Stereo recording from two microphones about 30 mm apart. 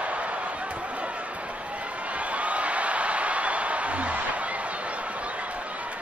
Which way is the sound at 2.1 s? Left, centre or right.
Right.